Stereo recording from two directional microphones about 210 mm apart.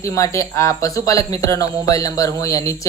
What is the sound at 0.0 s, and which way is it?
A woman's voice, 15° left (ahead or behind).